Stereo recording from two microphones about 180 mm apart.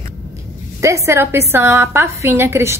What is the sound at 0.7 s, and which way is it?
A woman's voice, 15° right (ahead or behind).